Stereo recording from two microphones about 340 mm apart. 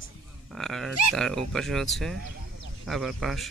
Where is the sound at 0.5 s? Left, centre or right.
Centre.